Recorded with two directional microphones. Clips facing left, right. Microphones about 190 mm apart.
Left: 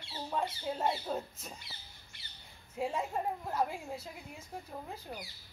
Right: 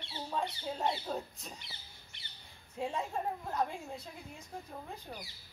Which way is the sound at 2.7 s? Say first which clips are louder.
Left 2 dB; 5° left (ahead or behind).